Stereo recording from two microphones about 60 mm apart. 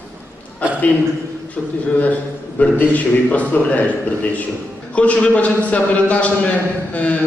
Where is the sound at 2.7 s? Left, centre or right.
Left.